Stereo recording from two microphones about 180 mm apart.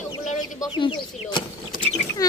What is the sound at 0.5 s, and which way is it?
A child's voice, 25° left (ahead or behind).